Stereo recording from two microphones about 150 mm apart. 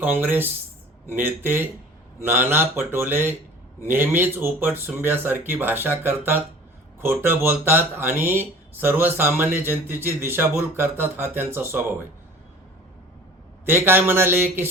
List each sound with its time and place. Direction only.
0.0 s speech: 10° right (ahead or behind)
13.7 s speech: 15° right (ahead or behind)